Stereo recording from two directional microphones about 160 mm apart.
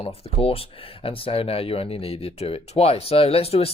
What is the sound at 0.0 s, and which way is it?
Speech, 35° left (ahead or behind).